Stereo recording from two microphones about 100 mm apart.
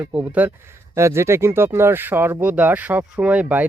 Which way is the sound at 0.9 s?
25° right (ahead or behind).